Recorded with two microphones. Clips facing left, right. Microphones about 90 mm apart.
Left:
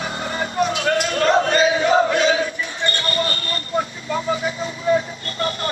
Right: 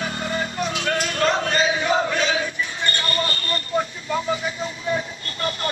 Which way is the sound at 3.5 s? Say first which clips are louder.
Right 1 dB; 35° left (ahead or behind).